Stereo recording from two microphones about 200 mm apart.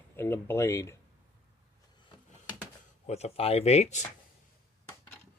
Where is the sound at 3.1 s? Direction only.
30° left (ahead or behind).